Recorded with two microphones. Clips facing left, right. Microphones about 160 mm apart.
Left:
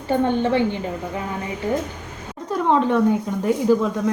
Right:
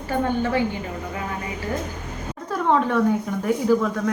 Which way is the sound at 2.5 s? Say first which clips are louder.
Left 2 dB; 15° left (ahead or behind).